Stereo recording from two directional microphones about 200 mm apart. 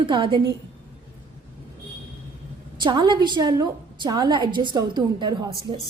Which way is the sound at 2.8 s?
20° right (ahead or behind).